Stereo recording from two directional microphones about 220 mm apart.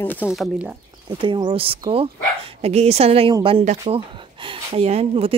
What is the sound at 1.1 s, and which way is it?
Speech, 20° right (ahead or behind).